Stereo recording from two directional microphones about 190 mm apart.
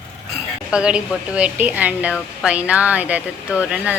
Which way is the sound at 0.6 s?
5° right (ahead or behind).